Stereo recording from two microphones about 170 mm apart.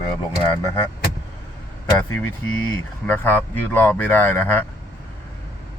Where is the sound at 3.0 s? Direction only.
10° left (ahead or behind).